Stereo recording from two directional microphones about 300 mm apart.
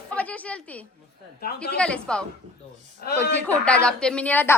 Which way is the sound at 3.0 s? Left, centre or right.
Left.